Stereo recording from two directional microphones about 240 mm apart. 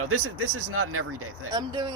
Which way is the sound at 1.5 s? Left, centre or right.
Centre.